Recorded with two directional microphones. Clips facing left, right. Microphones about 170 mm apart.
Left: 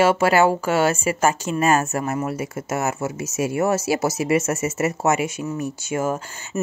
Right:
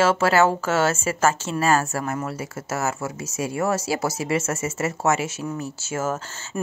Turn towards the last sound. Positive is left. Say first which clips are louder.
# left 3 dB
turn(degrees=15)  # may be behind; listen again after turning